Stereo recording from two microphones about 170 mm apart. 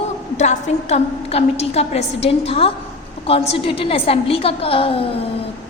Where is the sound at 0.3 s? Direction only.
40° left (ahead or behind).